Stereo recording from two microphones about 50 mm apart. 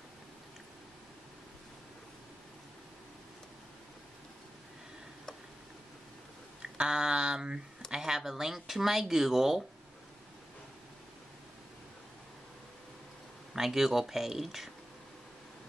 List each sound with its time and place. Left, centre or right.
6.8 s a sound: centre
7.9 s speech: centre
13.5 s speech: centre